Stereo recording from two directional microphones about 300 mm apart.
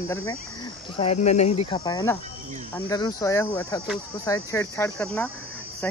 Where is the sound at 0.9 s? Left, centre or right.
Left.